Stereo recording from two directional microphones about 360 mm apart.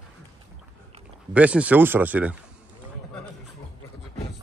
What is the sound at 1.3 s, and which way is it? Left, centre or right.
Speech, centre.